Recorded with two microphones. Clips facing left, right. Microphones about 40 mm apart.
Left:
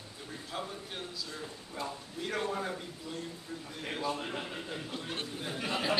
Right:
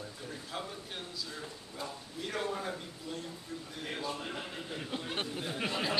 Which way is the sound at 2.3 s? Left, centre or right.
Centre.